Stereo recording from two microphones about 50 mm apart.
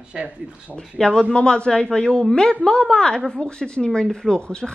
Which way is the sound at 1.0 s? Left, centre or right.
Centre.